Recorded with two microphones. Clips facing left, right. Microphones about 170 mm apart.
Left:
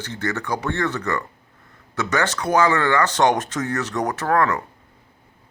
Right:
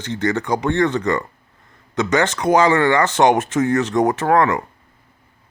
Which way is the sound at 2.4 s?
15° right (ahead or behind).